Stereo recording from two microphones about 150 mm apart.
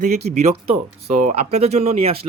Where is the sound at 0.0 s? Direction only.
50° right (ahead or behind).